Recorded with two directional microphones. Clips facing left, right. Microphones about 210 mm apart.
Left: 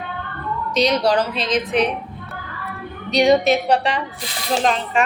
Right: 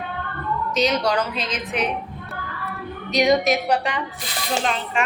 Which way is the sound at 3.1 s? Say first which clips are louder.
Left 3 dB; 30° left (ahead or behind).